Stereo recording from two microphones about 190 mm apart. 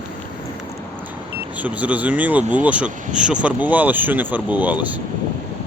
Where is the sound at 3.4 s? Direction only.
10° right (ahead or behind).